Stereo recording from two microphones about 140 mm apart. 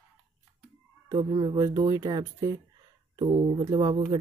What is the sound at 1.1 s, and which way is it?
Speech, 40° right (ahead or behind).